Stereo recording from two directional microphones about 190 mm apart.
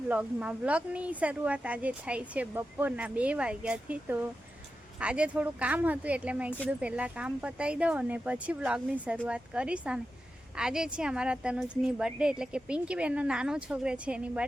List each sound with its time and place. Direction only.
0.1 s speech: 5° right (ahead or behind)